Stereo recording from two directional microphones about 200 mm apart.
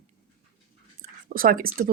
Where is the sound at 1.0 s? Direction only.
45° right (ahead or behind).